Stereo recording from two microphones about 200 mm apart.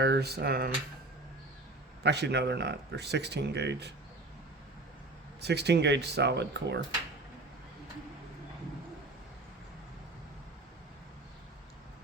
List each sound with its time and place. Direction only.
0.0 s speech: 55° right (ahead or behind)
2.0 s speech: 55° right (ahead or behind)
5.4 s speech: 55° right (ahead or behind)